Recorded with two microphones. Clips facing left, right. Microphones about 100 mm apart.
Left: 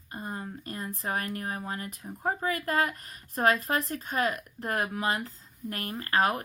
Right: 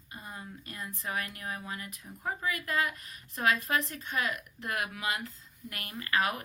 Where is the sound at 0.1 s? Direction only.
45° left (ahead or behind).